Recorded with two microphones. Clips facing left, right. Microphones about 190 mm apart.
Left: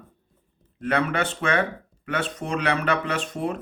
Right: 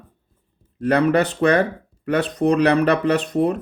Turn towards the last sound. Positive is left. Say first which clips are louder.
# right 9 dB
turn(degrees=-40)  # may be behind; listen again after turning